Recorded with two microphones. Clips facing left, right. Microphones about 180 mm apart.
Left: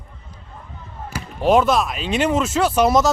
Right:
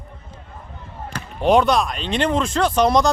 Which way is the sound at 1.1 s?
5° left (ahead or behind).